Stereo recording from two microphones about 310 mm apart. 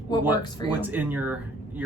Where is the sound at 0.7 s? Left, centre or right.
Centre.